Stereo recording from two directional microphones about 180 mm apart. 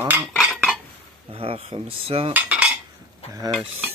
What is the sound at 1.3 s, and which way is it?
Cutlery, 30° right (ahead or behind).